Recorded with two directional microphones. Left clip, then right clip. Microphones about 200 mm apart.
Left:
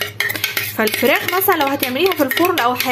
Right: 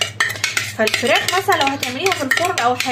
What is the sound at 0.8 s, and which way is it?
A woman's voice, 60° left (ahead or behind).